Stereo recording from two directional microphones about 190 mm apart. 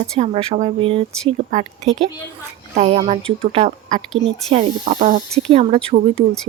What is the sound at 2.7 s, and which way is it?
Speech, 35° right (ahead or behind).